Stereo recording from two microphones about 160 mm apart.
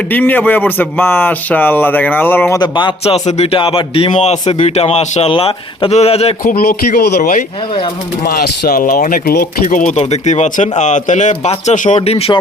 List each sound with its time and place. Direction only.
0.1 s speech: 10° left (ahead or behind)
2.6 s a man's voice: 30° left (ahead or behind)
6.6 s a man's voice: 80° left
7.2 s speech: 60° left (ahead or behind)
8.2 s speech: 70° left (ahead or behind)
9.6 s speech: 50° left (ahead or behind)